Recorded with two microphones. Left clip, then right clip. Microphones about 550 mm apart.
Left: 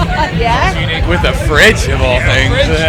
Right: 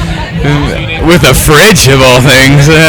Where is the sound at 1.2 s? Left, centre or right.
Right.